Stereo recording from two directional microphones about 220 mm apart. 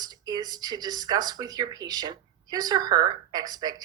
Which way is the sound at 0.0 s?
15° right (ahead or behind).